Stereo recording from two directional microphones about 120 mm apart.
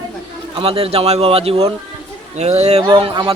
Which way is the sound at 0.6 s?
50° right (ahead or behind).